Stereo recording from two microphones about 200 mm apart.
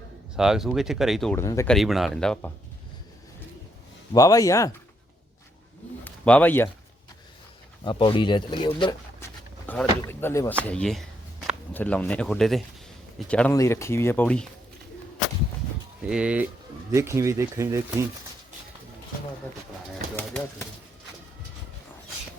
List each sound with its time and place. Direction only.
0.3 s speech: centre (ahead or behind)
1.4 s speech: 15° left (ahead or behind)
1.7 s speech: centre (ahead or behind)
4.1 s speech: 15° left (ahead or behind)
6.1 s a man's voice: 5° left (ahead or behind)
7.9 s speech: 25° left (ahead or behind)
9.6 s speech: 10° left (ahead or behind)
16.0 s speech: 5° right (ahead or behind)
20.1 s bird: 10° left (ahead or behind)